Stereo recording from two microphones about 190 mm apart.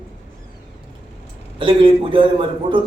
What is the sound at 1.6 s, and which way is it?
Speech, 25° right (ahead or behind).